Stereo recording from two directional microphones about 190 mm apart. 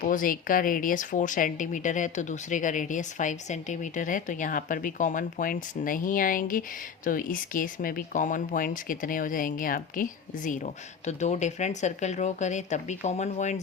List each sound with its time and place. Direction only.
0.0 s speech: 45° left (ahead or behind)